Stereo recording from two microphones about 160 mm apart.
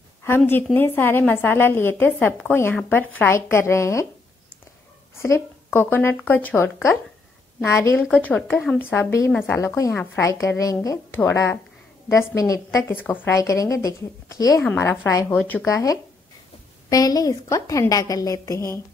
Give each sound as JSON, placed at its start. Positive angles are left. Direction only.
{"t": 0.7, "sound": "speech", "side_deg": 15}
{"t": 5.2, "sound": "speech", "side_deg": 15}
{"t": 9.6, "sound": "a woman's voice", "side_deg": 20}